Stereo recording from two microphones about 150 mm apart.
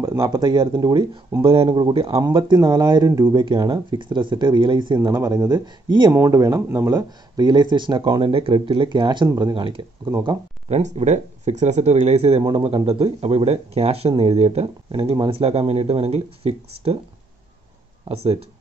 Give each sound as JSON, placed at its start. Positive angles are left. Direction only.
{"t": 0.0, "sound": "a sound", "side_deg": -15}
{"t": 0.3, "sound": "speech", "side_deg": -30}
{"t": 10.7, "sound": "speech", "side_deg": -50}
{"t": 18.0, "sound": "speech", "side_deg": -40}